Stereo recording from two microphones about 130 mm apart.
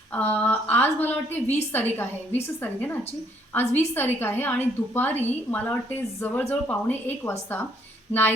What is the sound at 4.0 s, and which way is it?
A woman's voice, 15° left (ahead or behind).